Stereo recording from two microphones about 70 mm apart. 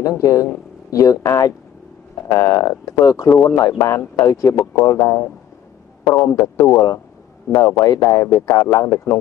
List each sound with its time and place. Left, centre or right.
0.0 s speech: left
6.3 s speech: left
6.6 s speech: left
7.5 s speech: left